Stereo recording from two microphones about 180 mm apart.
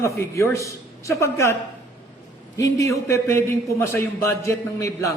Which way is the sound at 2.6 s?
15° left (ahead or behind).